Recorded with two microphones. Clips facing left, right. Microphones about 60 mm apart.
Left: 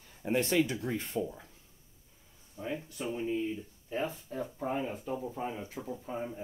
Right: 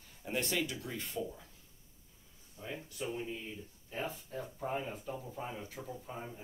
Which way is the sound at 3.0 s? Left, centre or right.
Left.